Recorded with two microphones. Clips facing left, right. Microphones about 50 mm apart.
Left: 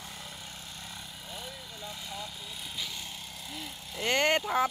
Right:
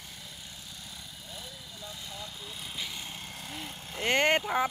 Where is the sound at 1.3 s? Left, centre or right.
Left.